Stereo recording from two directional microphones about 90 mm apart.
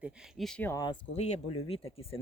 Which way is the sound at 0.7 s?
50° left (ahead or behind).